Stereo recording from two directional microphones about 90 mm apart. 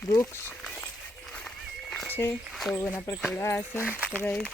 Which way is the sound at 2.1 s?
25° left (ahead or behind).